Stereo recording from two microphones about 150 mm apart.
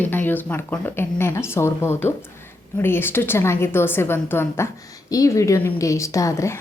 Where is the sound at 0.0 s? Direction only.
10° left (ahead or behind).